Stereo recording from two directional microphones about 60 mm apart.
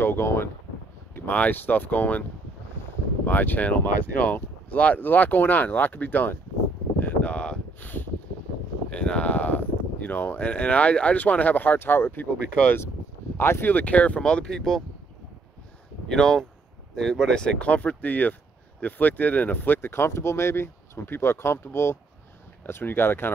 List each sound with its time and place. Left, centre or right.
0.0 s speech: left
1.3 s speech: left
3.3 s speech: left
7.0 s a sound: left
8.9 s speech: centre
16.1 s speech: centre; by 23.3 s left